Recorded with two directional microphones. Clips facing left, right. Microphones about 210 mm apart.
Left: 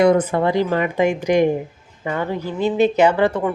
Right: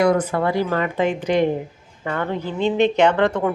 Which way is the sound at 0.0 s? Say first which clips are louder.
Left 3 dB; 20° left (ahead or behind).